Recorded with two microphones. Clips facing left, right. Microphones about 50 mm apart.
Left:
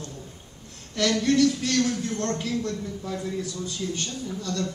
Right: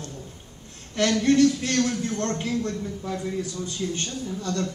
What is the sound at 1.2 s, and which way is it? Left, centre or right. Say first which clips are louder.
Speech: right 3 dB; right.